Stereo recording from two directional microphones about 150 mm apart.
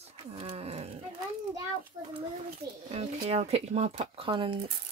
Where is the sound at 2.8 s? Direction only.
45° right (ahead or behind).